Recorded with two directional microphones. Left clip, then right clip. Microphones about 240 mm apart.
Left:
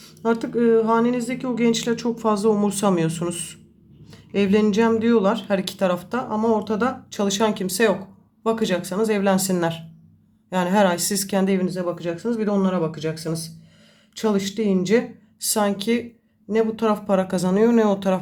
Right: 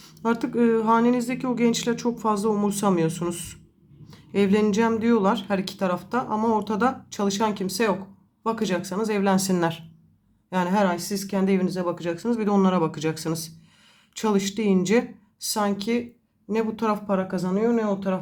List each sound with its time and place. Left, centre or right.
0.0 s a woman's voice: centre
11.4 s speech: centre
15.4 s speech: centre
17.1 s speech: centre